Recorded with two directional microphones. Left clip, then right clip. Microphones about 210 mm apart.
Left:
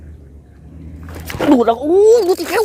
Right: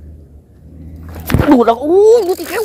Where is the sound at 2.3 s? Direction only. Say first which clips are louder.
Left 2 dB; 25° left (ahead or behind).